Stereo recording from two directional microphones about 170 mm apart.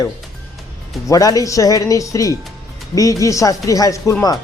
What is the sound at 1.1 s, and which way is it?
Speech, 20° left (ahead or behind).